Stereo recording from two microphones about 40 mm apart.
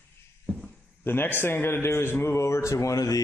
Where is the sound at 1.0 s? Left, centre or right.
Left.